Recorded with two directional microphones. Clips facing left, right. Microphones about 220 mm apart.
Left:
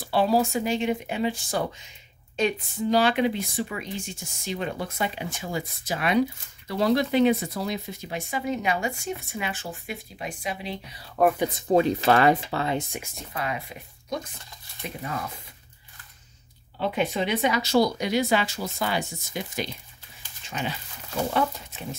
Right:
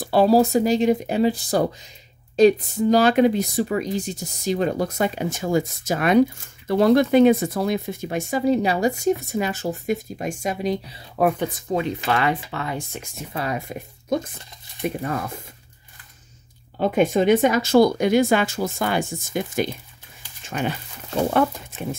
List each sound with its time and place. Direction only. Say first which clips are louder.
0.0 s speech: right 6 dB; 40° right (ahead or behind)
11.2 s speech: right 1 dB; 5° right (ahead or behind)
11.5 s speech: left 3 dB; 30° left (ahead or behind)
13.3 s speech: right 4 dB; 35° right (ahead or behind)
13.6 s speech: right 8 dB; 50° right (ahead or behind)
16.7 s speech: right 7 dB; 45° right (ahead or behind)